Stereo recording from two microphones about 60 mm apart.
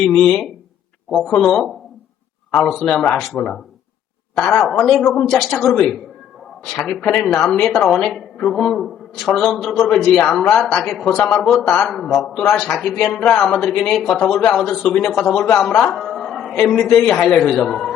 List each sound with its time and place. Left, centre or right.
0.0 s a man's voice: centre
3.3 s a man's voice: centre
14.8 s a man's voice: centre
15.1 s a man's voice: centre
17.5 s a man's voice: centre